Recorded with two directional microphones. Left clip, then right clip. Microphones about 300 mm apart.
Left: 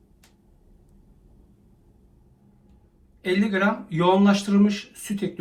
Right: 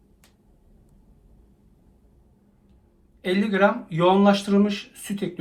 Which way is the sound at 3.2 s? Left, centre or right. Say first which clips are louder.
Right 3 dB; centre.